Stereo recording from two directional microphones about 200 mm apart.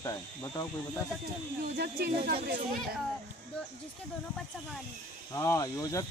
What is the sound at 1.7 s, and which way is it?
Speech, 55° right (ahead or behind).